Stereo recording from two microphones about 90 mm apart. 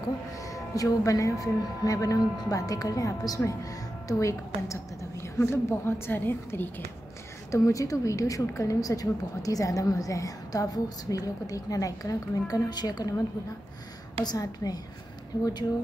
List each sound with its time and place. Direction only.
0.0 s speech: 40° left (ahead or behind); by 6.7 s 25° left (ahead or behind)
7.5 s speech: 35° left (ahead or behind)
14.2 s a woman's voice: 45° left (ahead or behind)